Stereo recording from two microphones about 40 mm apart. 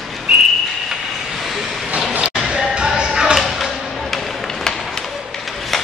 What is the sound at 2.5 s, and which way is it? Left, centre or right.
Music, right.